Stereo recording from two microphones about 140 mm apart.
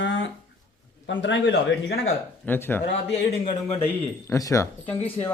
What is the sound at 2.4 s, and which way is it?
Speech, 15° left (ahead or behind).